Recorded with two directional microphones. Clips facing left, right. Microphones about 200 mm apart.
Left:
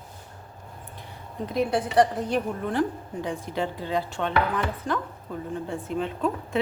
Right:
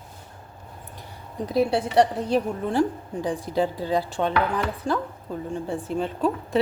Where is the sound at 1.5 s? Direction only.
35° right (ahead or behind).